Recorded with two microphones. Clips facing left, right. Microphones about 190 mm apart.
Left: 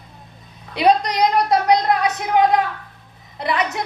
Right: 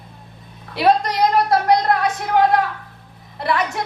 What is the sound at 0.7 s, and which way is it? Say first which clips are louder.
A woman's voice: even; 20° left (ahead or behind).